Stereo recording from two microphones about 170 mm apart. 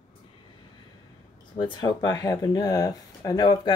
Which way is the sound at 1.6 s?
25° left (ahead or behind).